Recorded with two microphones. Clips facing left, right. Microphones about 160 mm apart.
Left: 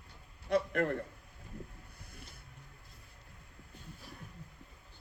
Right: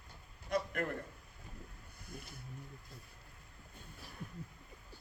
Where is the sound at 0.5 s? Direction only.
35° left (ahead or behind).